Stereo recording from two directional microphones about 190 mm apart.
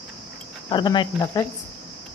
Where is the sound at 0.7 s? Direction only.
25° left (ahead or behind).